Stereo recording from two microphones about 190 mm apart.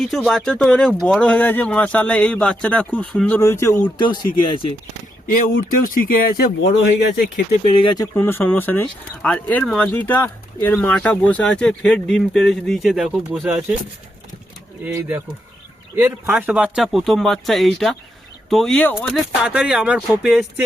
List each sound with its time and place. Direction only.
0.0 s speech: 5° left (ahead or behind); by 4.6 s 25° left (ahead or behind)
5.3 s speech: 50° left (ahead or behind)
7.6 s speech: 30° left (ahead or behind); by 13.7 s 5° right (ahead or behind)
16.0 s speech: 5° right (ahead or behind)